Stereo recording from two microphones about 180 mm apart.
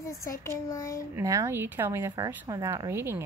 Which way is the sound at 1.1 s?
15° right (ahead or behind).